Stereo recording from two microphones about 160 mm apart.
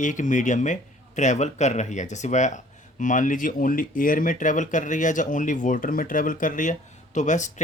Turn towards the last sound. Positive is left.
turn(degrees=50)  # may be behind; listen again after turning